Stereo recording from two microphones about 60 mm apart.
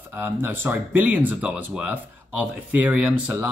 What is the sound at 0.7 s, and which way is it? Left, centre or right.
Speech, right.